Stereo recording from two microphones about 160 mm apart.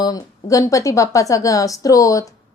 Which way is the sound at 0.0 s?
20° left (ahead or behind).